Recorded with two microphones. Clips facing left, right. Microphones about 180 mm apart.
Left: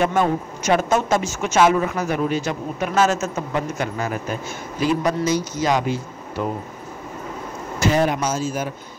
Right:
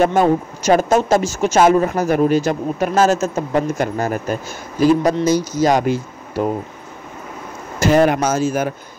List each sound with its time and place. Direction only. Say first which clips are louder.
0.0 s speech: right 5 dB; 35° right (ahead or behind)
7.8 s speech: right 5 dB; 55° right (ahead or behind)